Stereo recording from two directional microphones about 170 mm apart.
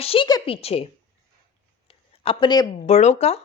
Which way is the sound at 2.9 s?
40° left (ahead or behind).